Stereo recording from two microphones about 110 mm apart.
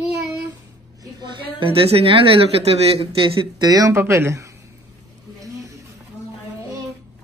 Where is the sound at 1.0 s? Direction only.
40° right (ahead or behind).